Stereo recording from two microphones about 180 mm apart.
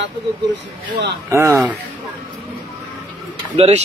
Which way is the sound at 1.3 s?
15° right (ahead or behind).